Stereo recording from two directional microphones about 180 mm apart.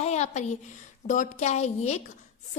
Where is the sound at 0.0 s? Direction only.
40° left (ahead or behind).